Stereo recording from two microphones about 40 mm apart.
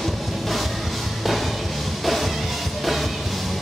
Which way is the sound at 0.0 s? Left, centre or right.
Centre.